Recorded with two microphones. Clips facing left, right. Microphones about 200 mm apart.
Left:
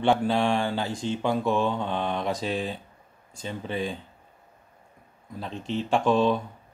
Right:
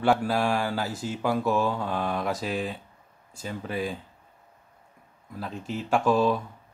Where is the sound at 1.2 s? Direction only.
5° right (ahead or behind).